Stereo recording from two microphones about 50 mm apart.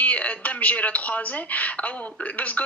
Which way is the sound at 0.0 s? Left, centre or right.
Left.